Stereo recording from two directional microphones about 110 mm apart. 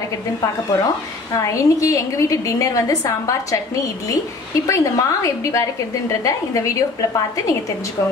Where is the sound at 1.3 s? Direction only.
30° left (ahead or behind).